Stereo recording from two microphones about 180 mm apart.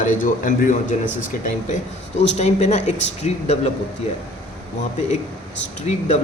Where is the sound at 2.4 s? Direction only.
40° left (ahead or behind).